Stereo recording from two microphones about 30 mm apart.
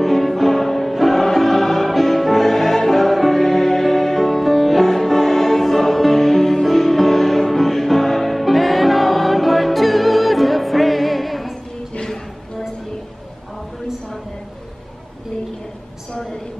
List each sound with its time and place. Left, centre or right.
0.0 s music: centre